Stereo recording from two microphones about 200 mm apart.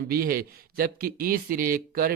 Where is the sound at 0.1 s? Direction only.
50° right (ahead or behind).